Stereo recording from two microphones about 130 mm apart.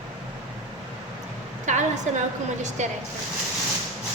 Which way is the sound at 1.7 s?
70° right (ahead or behind).